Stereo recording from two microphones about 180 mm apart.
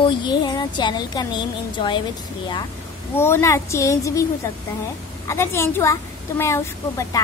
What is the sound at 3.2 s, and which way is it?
A woman's voice, 15° left (ahead or behind).